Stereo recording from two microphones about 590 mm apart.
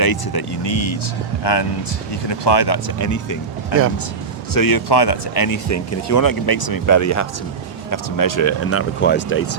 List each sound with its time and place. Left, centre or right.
0.0 s speech: left
4.5 s speech: left; by 9.6 s centre